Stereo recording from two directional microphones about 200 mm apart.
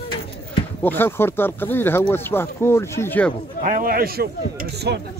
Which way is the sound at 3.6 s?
45° right (ahead or behind).